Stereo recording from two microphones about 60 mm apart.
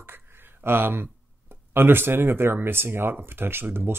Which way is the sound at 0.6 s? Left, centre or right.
Right.